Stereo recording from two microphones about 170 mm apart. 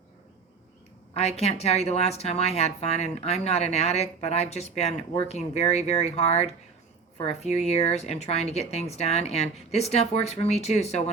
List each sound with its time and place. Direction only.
1.1 s a woman's voice: 40° left (ahead or behind)